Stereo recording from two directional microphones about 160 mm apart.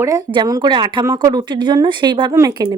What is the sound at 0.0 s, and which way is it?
Speech, 20° right (ahead or behind).